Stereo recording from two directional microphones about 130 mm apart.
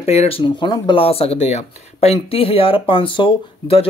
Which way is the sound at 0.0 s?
55° left (ahead or behind).